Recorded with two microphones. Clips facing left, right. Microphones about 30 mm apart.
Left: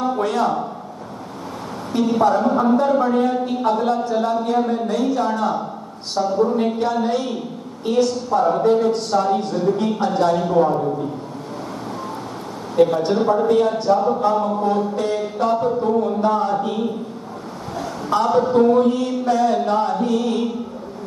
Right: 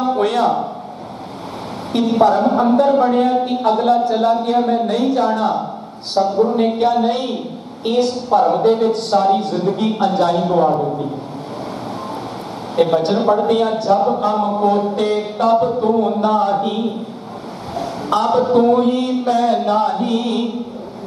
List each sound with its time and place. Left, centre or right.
0.2 s a man's voice: right
1.9 s a woman's voice: right
6.2 s speech: right
6.7 s a woman's voice: right
12.7 s a woman's voice: right
18.1 s a woman's voice: right